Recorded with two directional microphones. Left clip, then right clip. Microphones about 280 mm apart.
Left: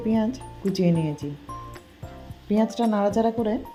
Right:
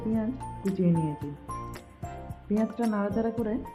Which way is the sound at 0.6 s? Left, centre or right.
Centre.